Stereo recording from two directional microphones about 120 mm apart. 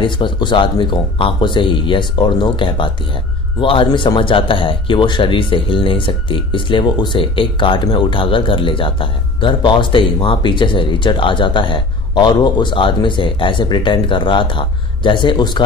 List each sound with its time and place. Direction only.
0.0 s speech: 40° left (ahead or behind)